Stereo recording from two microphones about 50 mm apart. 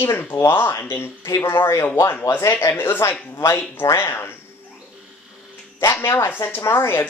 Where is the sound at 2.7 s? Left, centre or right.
Left.